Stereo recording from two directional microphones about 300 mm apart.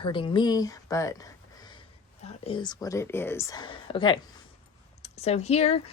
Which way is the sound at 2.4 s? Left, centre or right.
Centre.